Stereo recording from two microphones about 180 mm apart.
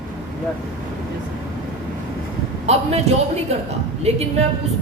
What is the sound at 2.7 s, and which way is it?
A man's voice, 35° right (ahead or behind).